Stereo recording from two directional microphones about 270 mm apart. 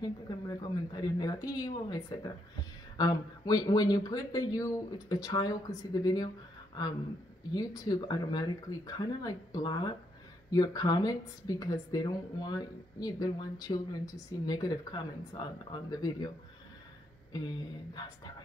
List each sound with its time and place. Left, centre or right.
0.0 s a woman's voice: centre
17.3 s a woman's voice: centre